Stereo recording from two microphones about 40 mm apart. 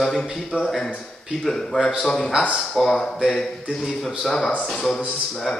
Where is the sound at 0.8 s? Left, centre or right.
Centre.